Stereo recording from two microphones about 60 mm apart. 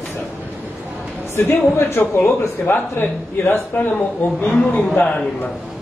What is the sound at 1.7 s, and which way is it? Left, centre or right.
A man's voice, left.